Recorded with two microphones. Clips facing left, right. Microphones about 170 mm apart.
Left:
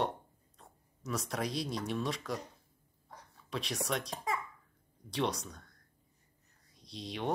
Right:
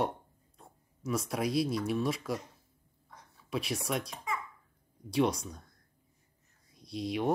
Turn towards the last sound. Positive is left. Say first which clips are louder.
# right 7 dB
turn(degrees=-10)  # may be behind; listen again after turning